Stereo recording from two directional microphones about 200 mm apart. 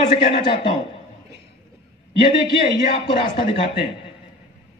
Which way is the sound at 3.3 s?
25° left (ahead or behind).